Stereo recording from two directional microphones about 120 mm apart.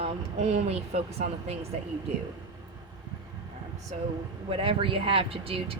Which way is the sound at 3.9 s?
65° right (ahead or behind).